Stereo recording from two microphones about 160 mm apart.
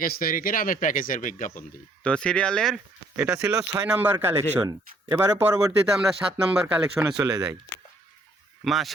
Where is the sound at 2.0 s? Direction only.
5° left (ahead or behind).